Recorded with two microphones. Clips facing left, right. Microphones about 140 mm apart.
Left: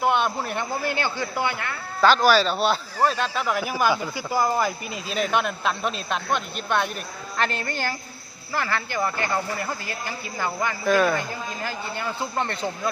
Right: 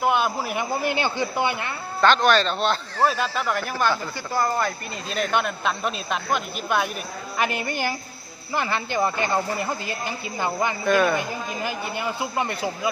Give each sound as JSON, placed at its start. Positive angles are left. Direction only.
{"t": 0.0, "sound": "a man's voice", "side_deg": 0}
{"t": 2.0, "sound": "speech", "side_deg": 5}
{"t": 3.0, "sound": "a man's voice", "side_deg": -5}
{"t": 3.4, "sound": "a man's voice", "side_deg": 5}
{"t": 10.8, "sound": "speech", "side_deg": 0}
{"t": 11.2, "sound": "a man's voice", "side_deg": -15}